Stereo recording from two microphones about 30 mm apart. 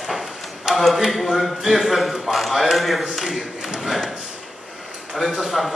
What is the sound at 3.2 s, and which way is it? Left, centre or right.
Speech, centre.